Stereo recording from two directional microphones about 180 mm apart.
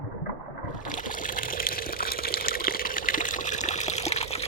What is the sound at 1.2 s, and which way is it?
Water, 50° left (ahead or behind).